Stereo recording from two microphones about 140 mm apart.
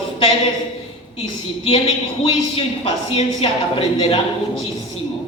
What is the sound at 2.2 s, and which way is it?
A woman's voice, 45° left (ahead or behind).